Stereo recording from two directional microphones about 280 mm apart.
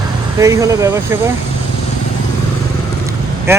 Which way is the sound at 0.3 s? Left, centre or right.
Centre.